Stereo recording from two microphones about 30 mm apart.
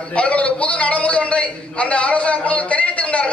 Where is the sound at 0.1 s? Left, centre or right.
Left.